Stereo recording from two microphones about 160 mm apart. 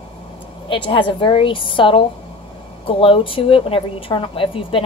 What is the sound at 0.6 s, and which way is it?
Speech, 30° left (ahead or behind).